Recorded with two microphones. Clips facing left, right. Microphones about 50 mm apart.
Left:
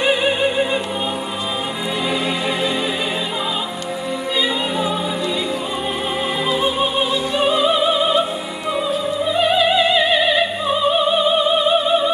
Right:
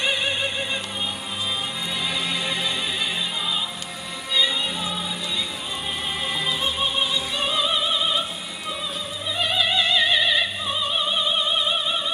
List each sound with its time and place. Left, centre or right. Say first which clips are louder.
0.0 s opera: left 8 dB; centre
2.0 s music: left 6 dB; centre
4.4 s music: left 3 dB; centre
6.4 s music: left 7 dB; centre
9.2 s opera: left 7 dB; centre